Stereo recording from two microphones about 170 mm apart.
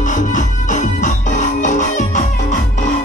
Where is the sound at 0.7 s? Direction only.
45° left (ahead or behind).